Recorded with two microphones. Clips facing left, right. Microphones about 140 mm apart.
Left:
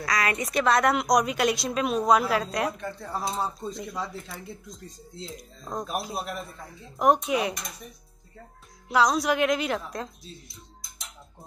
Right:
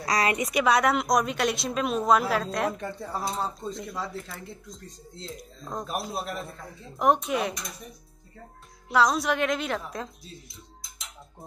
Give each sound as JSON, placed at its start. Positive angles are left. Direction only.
{"t": 0.1, "sound": "a woman's voice", "side_deg": -30}
{"t": 0.4, "sound": "speech", "side_deg": -10}
{"t": 8.8, "sound": "speech", "side_deg": 0}